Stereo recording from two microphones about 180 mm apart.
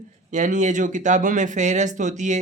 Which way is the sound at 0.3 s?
40° right (ahead or behind).